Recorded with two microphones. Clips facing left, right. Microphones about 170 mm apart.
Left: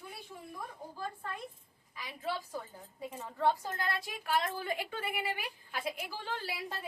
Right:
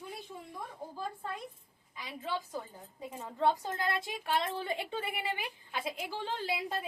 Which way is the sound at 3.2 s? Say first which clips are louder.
Right 1 dB; 20° right (ahead or behind).